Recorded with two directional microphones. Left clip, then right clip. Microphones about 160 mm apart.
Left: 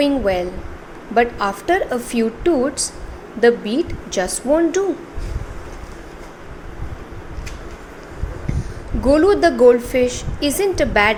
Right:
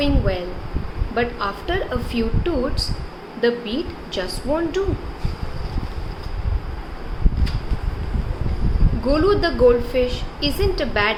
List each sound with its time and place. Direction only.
0.0 s a woman's voice: 50° left (ahead or behind)
9.0 s a woman's voice: 45° left (ahead or behind)